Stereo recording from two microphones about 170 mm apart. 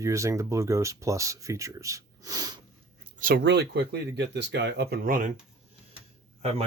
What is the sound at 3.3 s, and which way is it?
Speech, 90° right.